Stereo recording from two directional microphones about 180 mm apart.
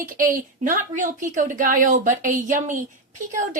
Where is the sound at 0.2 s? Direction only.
45° right (ahead or behind).